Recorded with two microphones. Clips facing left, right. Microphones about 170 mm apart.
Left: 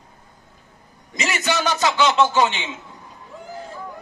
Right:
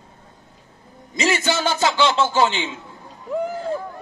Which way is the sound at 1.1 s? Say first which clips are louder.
Right 3 dB; 30° right (ahead or behind).